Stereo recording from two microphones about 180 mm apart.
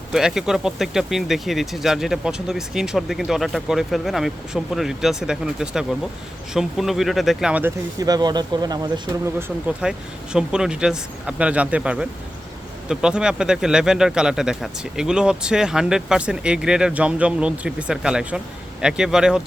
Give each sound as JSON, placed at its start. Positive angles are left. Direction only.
{"t": 0.1, "sound": "speech", "side_deg": -5}
{"t": 7.9, "sound": "speech", "side_deg": -20}
{"t": 9.8, "sound": "speech", "side_deg": -5}